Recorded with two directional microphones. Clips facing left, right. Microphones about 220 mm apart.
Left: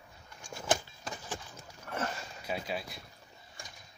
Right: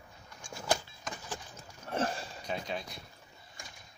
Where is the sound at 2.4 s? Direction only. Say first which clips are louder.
Left 1 dB; 5° left (ahead or behind).